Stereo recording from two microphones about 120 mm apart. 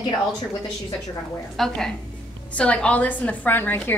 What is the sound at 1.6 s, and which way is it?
A woman's voice, 5° left (ahead or behind).